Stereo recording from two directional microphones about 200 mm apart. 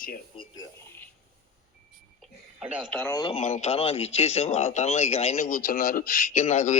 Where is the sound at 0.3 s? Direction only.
20° left (ahead or behind).